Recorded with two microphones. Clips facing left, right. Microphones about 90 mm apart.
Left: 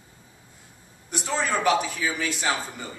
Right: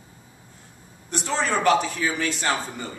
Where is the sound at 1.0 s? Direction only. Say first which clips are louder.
Right 2 dB; 5° left (ahead or behind).